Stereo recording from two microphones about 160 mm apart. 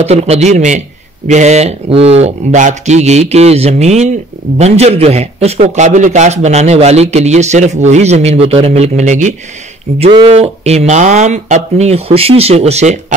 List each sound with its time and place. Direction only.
0.0 s a man's voice: 40° right (ahead or behind)
10.3 s a man's voice: 40° right (ahead or behind)